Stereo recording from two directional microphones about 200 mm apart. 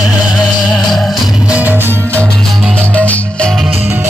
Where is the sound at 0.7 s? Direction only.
Centre (ahead or behind).